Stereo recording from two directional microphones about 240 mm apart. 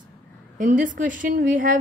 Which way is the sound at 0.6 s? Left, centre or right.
Right.